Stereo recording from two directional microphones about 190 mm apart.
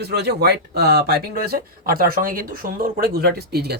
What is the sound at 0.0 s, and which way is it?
Speech, 60° right (ahead or behind).